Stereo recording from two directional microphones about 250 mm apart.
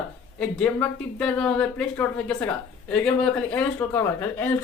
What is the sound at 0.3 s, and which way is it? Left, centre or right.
Speech, centre.